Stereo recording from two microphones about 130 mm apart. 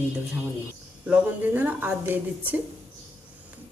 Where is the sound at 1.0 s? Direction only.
10° right (ahead or behind).